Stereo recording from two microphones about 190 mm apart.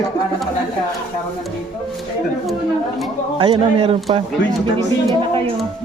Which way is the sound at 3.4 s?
30° right (ahead or behind).